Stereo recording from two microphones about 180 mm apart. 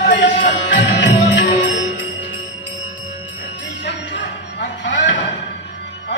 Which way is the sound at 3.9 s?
80° left.